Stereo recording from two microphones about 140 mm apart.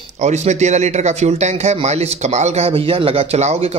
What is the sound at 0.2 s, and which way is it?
Speech, 55° right (ahead or behind).